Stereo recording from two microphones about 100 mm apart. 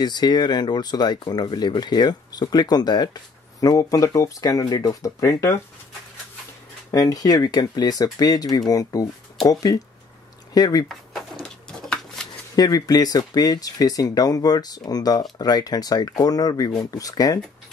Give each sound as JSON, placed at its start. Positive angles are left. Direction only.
{"t": 0.0, "sound": "speech", "side_deg": 45}
{"t": 6.9, "sound": "speech", "side_deg": 35}
{"t": 11.4, "sound": "a sound", "side_deg": 5}
{"t": 12.5, "sound": "speech", "side_deg": 40}